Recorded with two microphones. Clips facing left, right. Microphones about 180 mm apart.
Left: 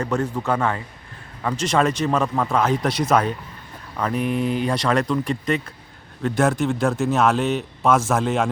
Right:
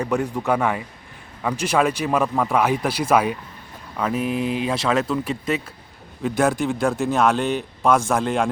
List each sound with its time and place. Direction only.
0.0 s a man's voice: 15° right (ahead or behind); by 8.4 s centre (ahead or behind)